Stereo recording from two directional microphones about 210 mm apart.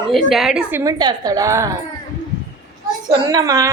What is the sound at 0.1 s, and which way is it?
A woman's voice, centre (ahead or behind).